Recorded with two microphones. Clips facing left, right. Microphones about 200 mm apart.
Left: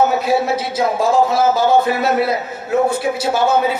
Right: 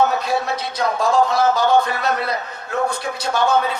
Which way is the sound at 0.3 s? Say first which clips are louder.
Left 5 dB; 5° left (ahead or behind).